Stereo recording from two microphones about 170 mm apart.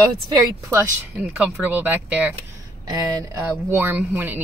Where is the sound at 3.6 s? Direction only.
10° right (ahead or behind).